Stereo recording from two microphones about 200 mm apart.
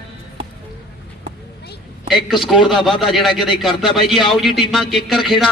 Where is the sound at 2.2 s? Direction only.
Centre (ahead or behind).